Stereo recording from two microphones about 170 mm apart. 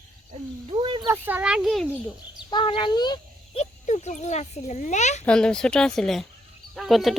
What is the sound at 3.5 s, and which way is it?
A child's voice, 40° left (ahead or behind).